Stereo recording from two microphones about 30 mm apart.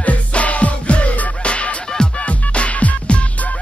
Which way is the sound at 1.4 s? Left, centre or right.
Left.